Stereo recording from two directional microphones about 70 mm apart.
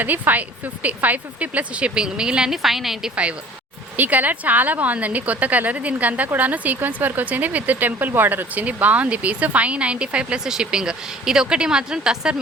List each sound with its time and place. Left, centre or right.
0.0 s speech: right; by 3.1 s centre
3.9 s a woman's voice: right